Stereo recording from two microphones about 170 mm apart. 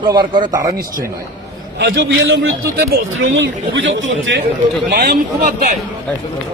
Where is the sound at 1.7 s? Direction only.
85° right.